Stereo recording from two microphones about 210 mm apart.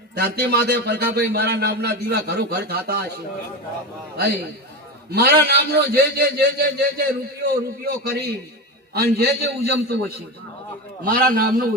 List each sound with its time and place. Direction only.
0.2 s a man's voice: 50° right (ahead or behind)
5.1 s a man's voice: 50° right (ahead or behind)